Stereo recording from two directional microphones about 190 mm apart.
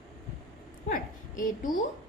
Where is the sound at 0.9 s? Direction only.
45° left (ahead or behind).